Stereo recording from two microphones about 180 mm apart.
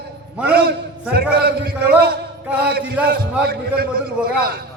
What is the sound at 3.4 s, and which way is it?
Speech, 55° right (ahead or behind).